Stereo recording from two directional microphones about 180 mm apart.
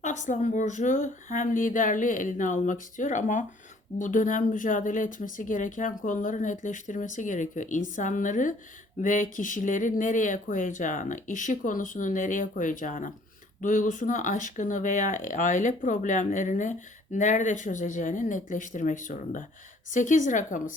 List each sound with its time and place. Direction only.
0.0 s speech: 40° left (ahead or behind)